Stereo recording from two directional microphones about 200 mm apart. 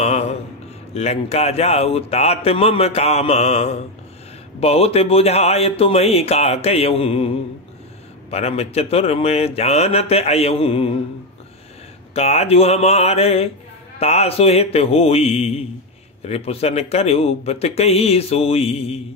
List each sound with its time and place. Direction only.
0.0 s a sound: 30° left (ahead or behind)
0.9 s speech: 30° left (ahead or behind)
12.1 s speech: 30° left (ahead or behind)